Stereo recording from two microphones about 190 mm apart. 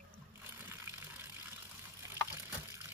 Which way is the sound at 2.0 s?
15° right (ahead or behind).